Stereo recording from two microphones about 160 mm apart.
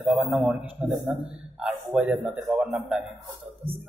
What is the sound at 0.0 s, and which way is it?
A man's voice, centre (ahead or behind).